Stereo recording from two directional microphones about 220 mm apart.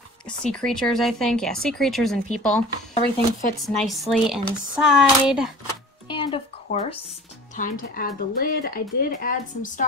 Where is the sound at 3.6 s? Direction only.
Centre (ahead or behind).